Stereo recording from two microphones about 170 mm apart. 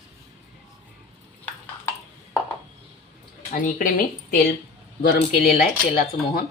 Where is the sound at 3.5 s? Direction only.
50° left (ahead or behind).